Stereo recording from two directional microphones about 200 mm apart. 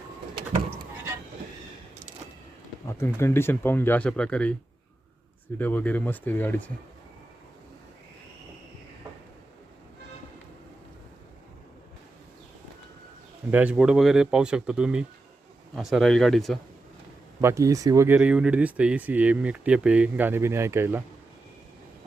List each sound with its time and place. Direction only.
3.2 s speech: 10° left (ahead or behind)
5.5 s speech: 10° left (ahead or behind)
13.5 s speech: 5° right (ahead or behind)
17.4 s speech: 15° right (ahead or behind)